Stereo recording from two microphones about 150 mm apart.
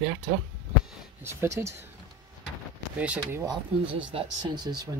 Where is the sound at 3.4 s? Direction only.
30° right (ahead or behind).